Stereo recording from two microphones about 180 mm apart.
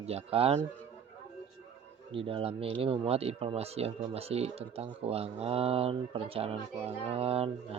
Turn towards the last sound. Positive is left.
turn(degrees=-35)  # may be behind; listen again after turning